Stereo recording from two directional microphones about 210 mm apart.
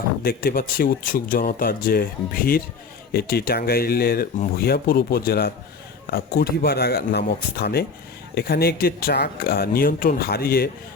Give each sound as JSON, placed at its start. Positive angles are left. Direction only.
{"t": 0.2, "sound": "speech", "side_deg": 45}